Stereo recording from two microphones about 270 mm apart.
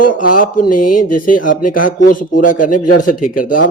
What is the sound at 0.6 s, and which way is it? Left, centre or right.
Speech, left.